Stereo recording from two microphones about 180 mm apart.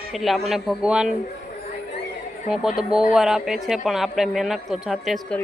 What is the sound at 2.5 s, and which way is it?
Speech, centre (ahead or behind).